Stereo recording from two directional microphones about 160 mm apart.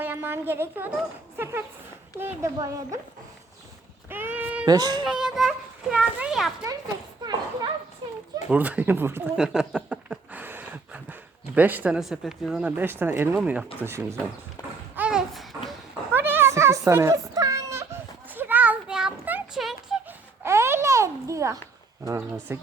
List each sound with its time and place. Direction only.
0.0 s a woman's voice: 15° right (ahead or behind)
4.1 s sheep: 10° right (ahead or behind)
4.6 s speech: 25° right (ahead or behind)
5.0 s a child's voice: 5° right (ahead or behind)
7.2 s children playing: 30° right (ahead or behind)
8.4 s a woman's voice: 10° right (ahead or behind)
14.9 s babbling: 5° right (ahead or behind)
16.1 s a sound: 15° right (ahead or behind)
20.4 s a sound: 15° right (ahead or behind)
22.0 s a woman's voice: 15° right (ahead or behind)